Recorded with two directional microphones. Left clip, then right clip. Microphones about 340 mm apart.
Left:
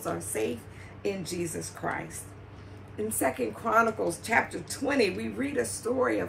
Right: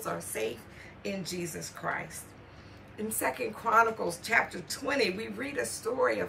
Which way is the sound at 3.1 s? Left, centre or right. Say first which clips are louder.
Left 2 dB; centre.